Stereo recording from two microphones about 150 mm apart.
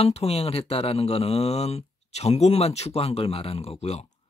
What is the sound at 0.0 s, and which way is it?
Speech, 40° left (ahead or behind).